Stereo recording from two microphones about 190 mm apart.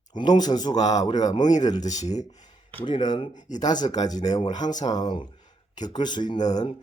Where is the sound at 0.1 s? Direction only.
20° left (ahead or behind).